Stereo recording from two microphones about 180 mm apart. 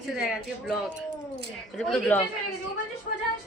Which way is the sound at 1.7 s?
5° left (ahead or behind).